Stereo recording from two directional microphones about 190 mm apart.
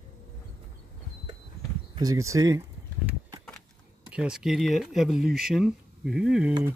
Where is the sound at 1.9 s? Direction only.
20° right (ahead or behind).